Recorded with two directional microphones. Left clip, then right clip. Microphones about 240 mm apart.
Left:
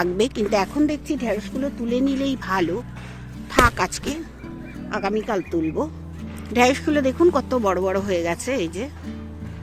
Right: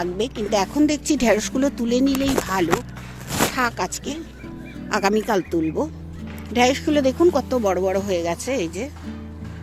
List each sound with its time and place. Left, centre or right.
0.0 s speech: centre
0.5 s speech: centre; by 1.7 s right
1.9 s speech: centre
4.9 s speech: centre